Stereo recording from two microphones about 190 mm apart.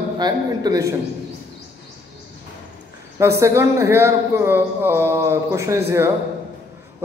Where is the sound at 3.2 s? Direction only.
15° right (ahead or behind).